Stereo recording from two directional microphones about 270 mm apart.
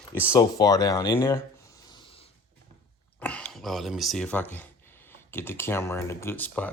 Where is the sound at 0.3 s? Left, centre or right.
Centre.